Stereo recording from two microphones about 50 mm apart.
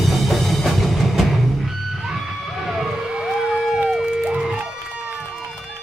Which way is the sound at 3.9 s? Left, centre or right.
Centre.